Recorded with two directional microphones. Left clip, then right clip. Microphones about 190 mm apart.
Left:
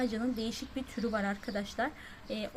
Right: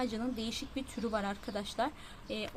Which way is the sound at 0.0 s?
Centre (ahead or behind).